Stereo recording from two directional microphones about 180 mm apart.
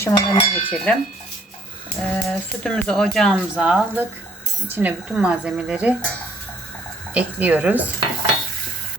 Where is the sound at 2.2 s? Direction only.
5° left (ahead or behind).